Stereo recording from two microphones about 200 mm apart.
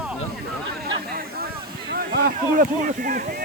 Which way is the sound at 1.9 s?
50° right (ahead or behind).